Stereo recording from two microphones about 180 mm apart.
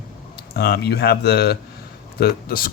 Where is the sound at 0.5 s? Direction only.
60° left (ahead or behind).